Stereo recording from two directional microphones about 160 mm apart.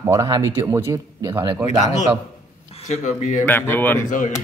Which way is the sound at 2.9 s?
50° left (ahead or behind).